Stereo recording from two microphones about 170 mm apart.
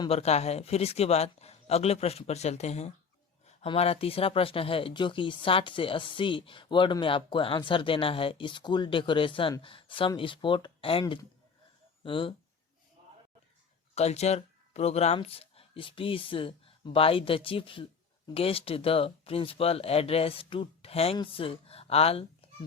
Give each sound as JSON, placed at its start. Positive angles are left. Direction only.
{"t": 0.1, "sound": "speech", "side_deg": 40}
{"t": 12.0, "sound": "speech", "side_deg": 30}
{"t": 13.9, "sound": "speech", "side_deg": 40}